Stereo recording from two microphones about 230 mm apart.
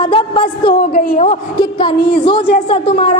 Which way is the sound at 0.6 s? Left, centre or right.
Left.